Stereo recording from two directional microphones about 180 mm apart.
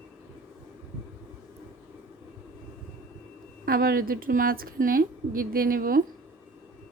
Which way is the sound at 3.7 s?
55° right (ahead or behind).